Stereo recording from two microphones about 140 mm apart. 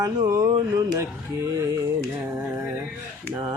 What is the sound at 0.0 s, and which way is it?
Speech, 25° right (ahead or behind).